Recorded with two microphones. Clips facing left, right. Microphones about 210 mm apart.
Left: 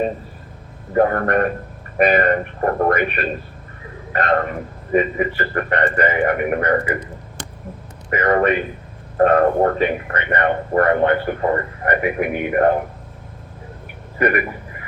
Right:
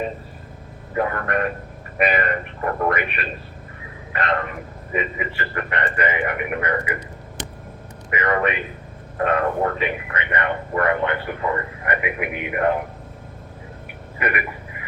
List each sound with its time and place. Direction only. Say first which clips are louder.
0.9 s a man's voice: left 7 dB; 45° left (ahead or behind)
8.1 s a man's voice: left 5 dB; 40° left (ahead or behind)